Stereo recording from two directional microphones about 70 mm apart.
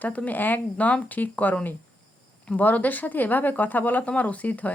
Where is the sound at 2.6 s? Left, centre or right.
Left.